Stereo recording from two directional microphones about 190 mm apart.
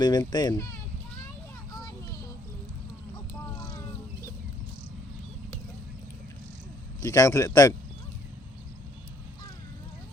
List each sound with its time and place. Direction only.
0.0 s speech: 20° left (ahead or behind)
1.7 s a sound: 20° left (ahead or behind)
7.0 s a man's voice: 15° left (ahead or behind)